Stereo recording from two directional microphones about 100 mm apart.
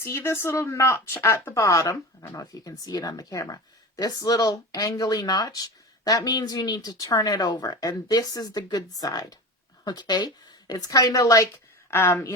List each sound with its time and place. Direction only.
0.0 s speech: 25° left (ahead or behind)